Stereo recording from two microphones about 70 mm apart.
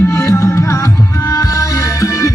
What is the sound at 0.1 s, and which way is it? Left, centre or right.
Music, left.